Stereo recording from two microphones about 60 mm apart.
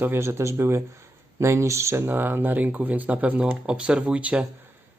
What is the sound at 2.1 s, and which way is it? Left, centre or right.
Speech, right.